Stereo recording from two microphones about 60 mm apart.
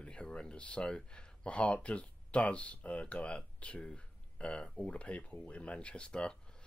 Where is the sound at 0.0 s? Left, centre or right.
Centre.